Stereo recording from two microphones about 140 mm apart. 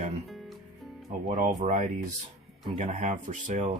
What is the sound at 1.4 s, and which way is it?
Speech, 65° right (ahead or behind).